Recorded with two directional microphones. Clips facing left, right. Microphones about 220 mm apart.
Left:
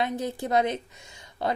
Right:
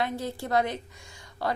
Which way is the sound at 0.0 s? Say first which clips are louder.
Left 2 dB; 20° left (ahead or behind).